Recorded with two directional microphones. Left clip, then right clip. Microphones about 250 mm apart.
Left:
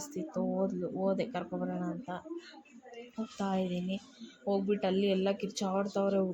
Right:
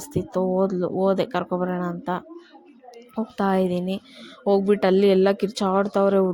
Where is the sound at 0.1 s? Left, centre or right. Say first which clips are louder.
Right 13 dB; right.